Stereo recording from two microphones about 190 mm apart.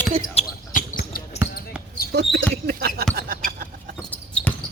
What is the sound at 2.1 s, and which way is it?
Speech, 60° right (ahead or behind).